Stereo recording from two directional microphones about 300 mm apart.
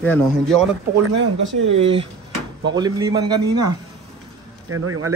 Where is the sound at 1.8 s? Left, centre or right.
Centre.